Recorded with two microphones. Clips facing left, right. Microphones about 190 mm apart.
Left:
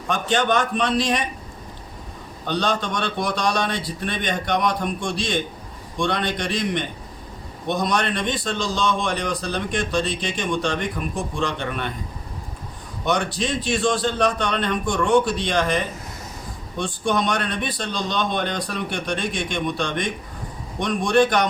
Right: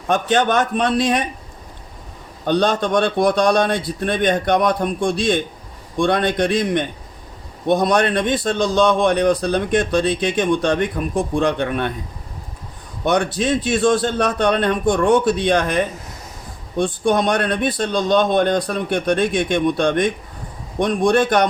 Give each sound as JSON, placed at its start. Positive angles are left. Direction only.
{"t": 0.1, "sound": "a man's voice", "side_deg": -55}
{"t": 2.5, "sound": "a man's voice", "side_deg": -50}
{"t": 13.1, "sound": "a man's voice", "side_deg": -55}